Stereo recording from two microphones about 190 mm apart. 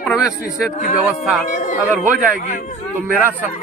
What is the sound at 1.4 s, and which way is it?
Speech, 45° left (ahead or behind).